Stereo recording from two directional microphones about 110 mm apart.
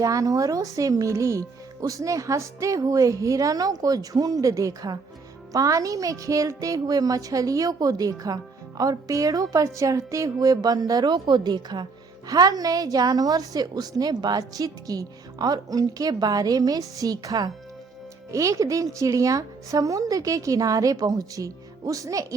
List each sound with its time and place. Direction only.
0.0 s a woman's voice: 30° right (ahead or behind)